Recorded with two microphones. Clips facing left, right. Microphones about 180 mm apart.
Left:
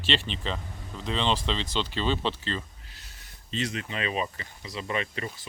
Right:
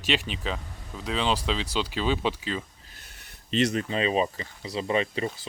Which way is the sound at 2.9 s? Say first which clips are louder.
Right 2 dB; 55° right (ahead or behind).